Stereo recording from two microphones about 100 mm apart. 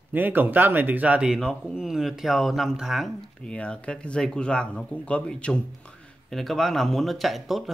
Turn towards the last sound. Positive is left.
turn(degrees=0)  # may be behind; listen again after turning